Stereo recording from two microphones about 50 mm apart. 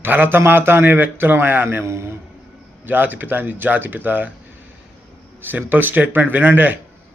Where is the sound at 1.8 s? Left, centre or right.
Right.